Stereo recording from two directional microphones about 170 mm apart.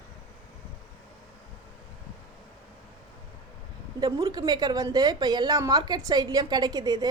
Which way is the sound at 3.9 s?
25° right (ahead or behind).